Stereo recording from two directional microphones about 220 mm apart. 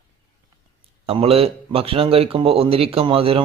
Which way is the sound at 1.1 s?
25° right (ahead or behind).